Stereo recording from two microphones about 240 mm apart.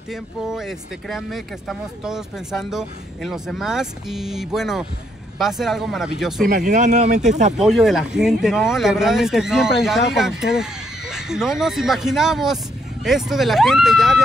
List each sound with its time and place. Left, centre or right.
0.1 s speech: centre
6.4 s speech: right
7.5 s speech: centre